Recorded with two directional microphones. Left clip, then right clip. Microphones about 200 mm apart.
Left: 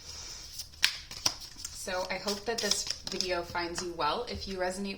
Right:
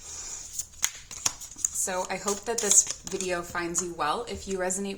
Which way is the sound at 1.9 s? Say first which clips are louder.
Right 1 dB; 40° right (ahead or behind).